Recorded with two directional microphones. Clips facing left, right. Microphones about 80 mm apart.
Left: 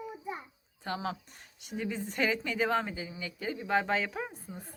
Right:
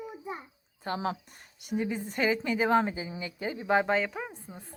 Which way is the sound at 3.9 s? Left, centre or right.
Centre.